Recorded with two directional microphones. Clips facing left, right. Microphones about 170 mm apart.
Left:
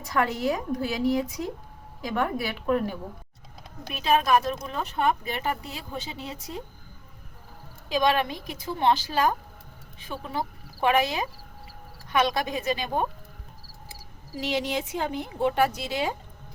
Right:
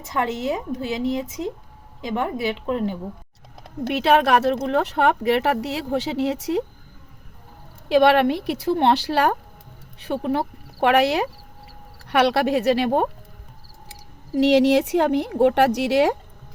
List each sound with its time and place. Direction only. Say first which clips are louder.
0.0 s speech: right 1 dB; 20° right (ahead or behind)
3.6 s speech: right 13 dB; 75° right (ahead or behind)
7.9 s speech: right 8 dB; 70° right (ahead or behind)
14.3 s speech: right 13 dB; 70° right (ahead or behind)